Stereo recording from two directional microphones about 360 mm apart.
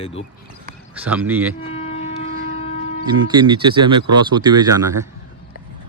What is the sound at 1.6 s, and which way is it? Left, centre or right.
Train, centre.